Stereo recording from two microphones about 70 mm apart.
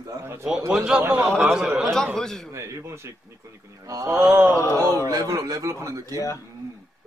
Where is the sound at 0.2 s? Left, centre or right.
Right.